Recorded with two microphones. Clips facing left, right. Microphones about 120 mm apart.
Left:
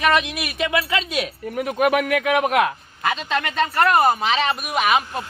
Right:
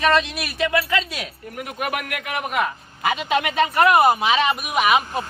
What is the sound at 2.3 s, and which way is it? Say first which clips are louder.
Speech: left 4 dB; 80° left.